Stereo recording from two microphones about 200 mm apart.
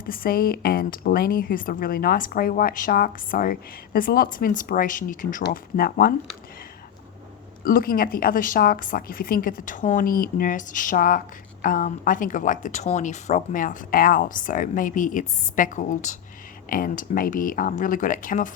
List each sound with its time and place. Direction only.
0.0 s speech: 45° left (ahead or behind)
7.6 s speech: 45° left (ahead or behind)